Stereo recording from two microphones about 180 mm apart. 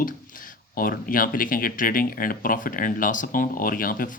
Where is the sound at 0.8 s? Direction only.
50° left (ahead or behind).